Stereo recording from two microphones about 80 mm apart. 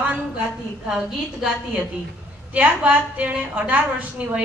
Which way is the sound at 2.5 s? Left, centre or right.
Centre.